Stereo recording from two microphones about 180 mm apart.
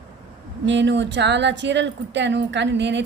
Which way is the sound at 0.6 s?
80° right.